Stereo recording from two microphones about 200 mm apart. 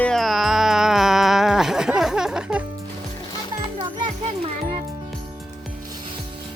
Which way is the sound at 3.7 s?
25° right (ahead or behind).